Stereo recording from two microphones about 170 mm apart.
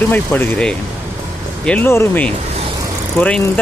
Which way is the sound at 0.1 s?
10° left (ahead or behind).